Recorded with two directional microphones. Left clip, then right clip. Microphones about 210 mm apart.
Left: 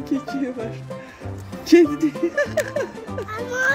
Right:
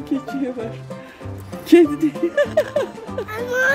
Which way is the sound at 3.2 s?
25° right (ahead or behind).